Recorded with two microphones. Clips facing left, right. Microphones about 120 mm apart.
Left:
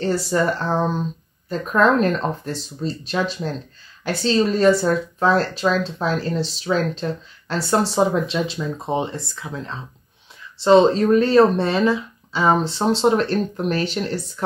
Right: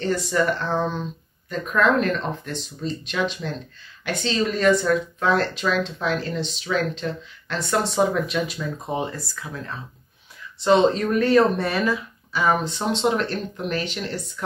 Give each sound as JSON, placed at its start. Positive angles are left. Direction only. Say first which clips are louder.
{"t": 0.0, "sound": "speech", "louder": "left 2 dB", "side_deg": 35}